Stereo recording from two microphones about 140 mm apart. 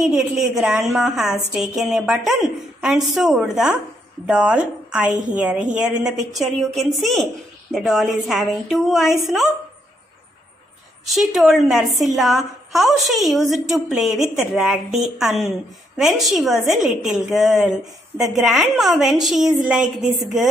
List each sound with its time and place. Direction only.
0.0 s a woman's voice: 5° right (ahead or behind)
11.1 s a woman's voice: centre (ahead or behind)